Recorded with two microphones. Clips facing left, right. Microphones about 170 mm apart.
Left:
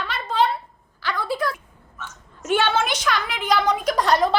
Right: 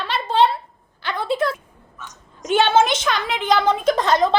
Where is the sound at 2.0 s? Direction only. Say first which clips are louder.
Right 1 dB; 15° right (ahead or behind).